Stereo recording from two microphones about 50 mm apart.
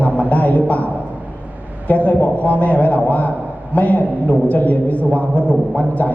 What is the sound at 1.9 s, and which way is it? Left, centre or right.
A man's voice, left.